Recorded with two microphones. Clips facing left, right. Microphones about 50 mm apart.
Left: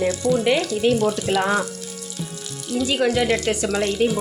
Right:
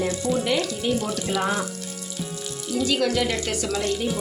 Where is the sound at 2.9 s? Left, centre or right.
Left.